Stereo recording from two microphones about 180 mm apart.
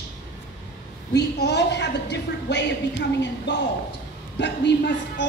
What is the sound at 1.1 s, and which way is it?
A woman's voice, 70° left (ahead or behind).